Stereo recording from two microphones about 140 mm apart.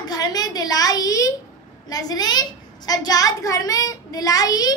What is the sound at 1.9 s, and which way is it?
A woman's voice, 25° left (ahead or behind).